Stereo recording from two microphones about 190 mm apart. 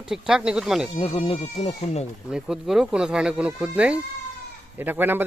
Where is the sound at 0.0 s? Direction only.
5° right (ahead or behind).